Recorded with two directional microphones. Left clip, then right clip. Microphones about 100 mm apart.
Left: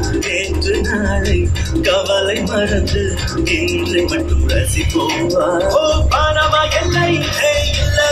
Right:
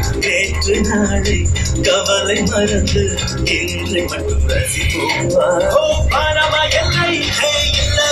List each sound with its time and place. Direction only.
1.9 s music: 25° right (ahead or behind)
5.0 s music: 25° right (ahead or behind)